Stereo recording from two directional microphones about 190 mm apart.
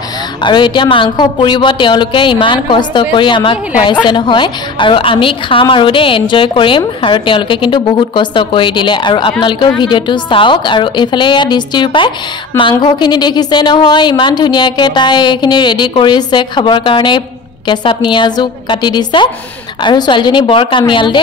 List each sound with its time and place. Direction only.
0.4 s a woman's voice: 25° left (ahead or behind)